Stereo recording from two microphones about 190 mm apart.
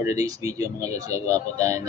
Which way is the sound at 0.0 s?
20° right (ahead or behind).